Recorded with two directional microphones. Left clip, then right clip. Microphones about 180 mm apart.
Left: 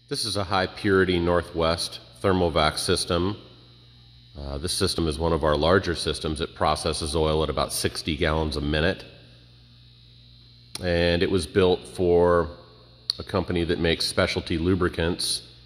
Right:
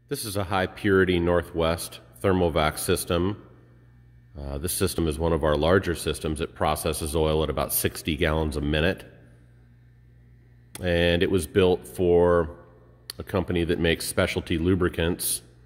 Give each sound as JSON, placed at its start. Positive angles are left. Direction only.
{"t": 0.1, "sound": "speech", "side_deg": -10}
{"t": 4.4, "sound": "speech", "side_deg": -10}
{"t": 10.7, "sound": "speech", "side_deg": -10}